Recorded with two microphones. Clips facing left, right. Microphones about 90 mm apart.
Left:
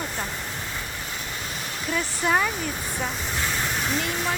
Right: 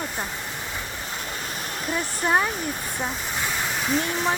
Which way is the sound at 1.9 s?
20° right (ahead or behind).